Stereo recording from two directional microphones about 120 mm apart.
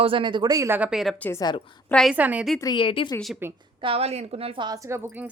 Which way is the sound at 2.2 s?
15° right (ahead or behind).